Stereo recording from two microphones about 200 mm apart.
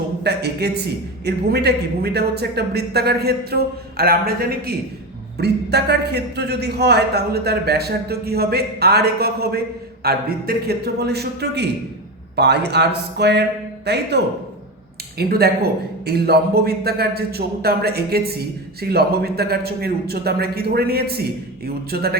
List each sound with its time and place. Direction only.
0.2 s a man's voice: 55° right (ahead or behind)
15.2 s a man's voice: 50° right (ahead or behind)